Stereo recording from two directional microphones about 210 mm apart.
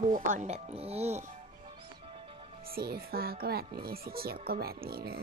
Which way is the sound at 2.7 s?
45° right (ahead or behind).